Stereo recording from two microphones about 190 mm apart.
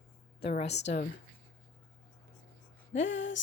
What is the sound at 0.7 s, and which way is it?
Speech, 65° left (ahead or behind).